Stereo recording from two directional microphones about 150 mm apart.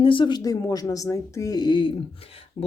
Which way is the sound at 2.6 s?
45° left (ahead or behind).